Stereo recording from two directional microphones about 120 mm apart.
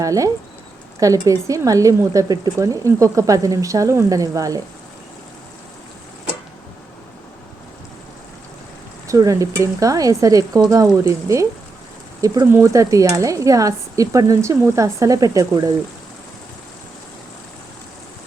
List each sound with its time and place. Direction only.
0.0 s speech: 30° right (ahead or behind)
9.0 s speech: 30° right (ahead or behind)